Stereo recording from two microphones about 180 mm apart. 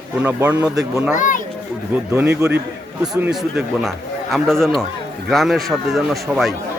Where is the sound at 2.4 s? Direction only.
15° right (ahead or behind).